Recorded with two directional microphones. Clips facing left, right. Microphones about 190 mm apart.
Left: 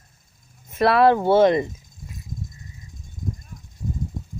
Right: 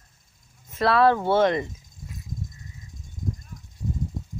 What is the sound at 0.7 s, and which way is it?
Speech, 15° left (ahead or behind).